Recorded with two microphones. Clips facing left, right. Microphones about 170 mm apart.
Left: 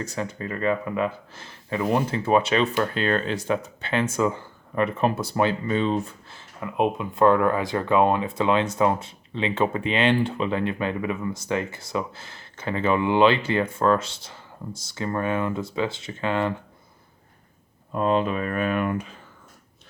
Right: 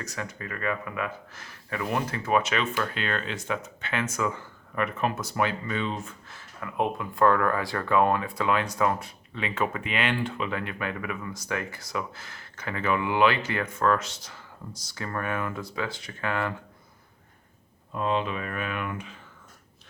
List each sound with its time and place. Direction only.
0.0 s speech: 30° left (ahead or behind)
17.9 s speech: 45° left (ahead or behind)